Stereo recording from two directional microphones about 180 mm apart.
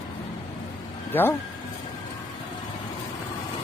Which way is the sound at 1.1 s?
10° left (ahead or behind).